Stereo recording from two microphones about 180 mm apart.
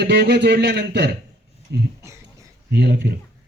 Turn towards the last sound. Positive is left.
turn(degrees=-70)  # may be behind; listen again after turning